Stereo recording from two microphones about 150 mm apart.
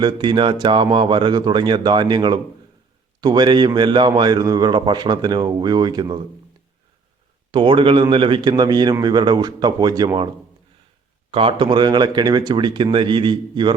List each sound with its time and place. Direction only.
0.0 s a man's voice: 30° right (ahead or behind)
7.5 s a man's voice: 35° right (ahead or behind)
11.3 s speech: 35° right (ahead or behind)